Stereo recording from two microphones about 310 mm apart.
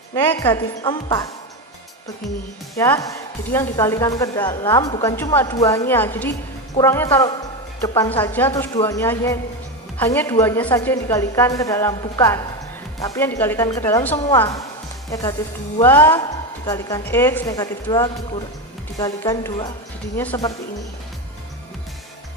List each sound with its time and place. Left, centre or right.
0.2 s speech: centre
2.7 s speech: centre